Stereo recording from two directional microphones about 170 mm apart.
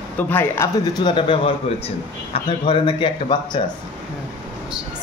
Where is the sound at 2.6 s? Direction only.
30° left (ahead or behind).